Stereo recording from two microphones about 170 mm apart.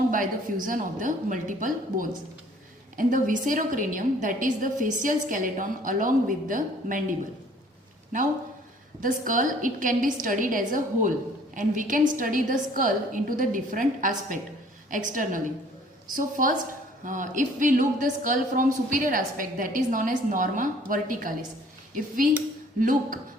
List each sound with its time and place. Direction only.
0.1 s a woman's voice: 55° right (ahead or behind)
9.0 s a woman's voice: 50° right (ahead or behind)